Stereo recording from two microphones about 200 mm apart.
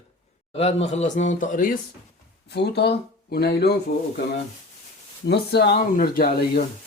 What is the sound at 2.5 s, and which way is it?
Speech, 55° left (ahead or behind).